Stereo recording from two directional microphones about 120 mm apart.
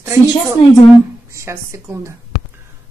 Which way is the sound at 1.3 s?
25° right (ahead or behind).